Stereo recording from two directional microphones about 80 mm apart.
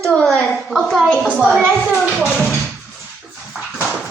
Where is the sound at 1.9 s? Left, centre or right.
Centre.